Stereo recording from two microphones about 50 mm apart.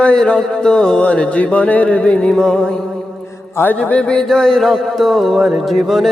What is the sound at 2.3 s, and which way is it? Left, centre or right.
Music, centre.